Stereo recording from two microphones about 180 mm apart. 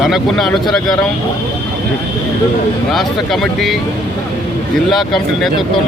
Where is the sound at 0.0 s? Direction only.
Centre (ahead or behind).